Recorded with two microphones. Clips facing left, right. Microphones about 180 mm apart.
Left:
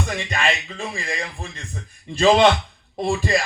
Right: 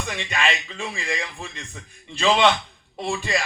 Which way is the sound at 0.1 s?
35° left (ahead or behind).